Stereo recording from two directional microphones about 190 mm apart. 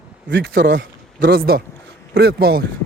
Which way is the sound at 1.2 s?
50° right (ahead or behind).